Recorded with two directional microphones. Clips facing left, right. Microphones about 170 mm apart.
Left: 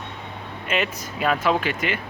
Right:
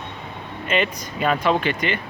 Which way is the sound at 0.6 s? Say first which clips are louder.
Right 3 dB; 5° left (ahead or behind).